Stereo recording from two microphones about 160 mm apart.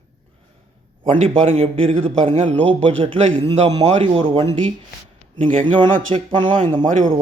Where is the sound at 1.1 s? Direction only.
40° right (ahead or behind).